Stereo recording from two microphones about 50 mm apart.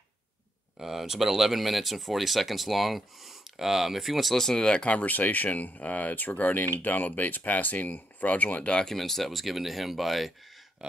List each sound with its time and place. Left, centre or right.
0.7 s speech: centre; by 8.7 s left
8.7 s speech: centre
10.8 s a sound: centre